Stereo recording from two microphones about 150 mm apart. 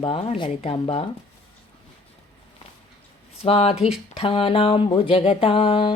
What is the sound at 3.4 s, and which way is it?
Speech, 40° left (ahead or behind).